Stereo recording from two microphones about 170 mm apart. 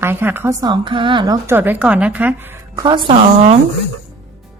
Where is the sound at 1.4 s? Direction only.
10° right (ahead or behind).